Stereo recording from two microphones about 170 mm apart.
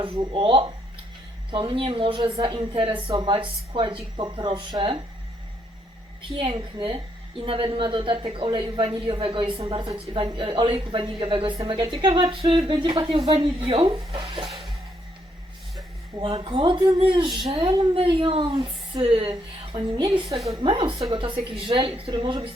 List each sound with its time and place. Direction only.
0.0 s a woman's voice: 30° right (ahead or behind)
6.3 s a woman's voice: 30° right (ahead or behind)
16.2 s a woman's voice: 30° right (ahead or behind)